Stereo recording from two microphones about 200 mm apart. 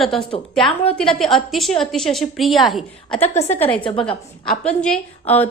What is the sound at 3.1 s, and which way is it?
Speech, 30° left (ahead or behind).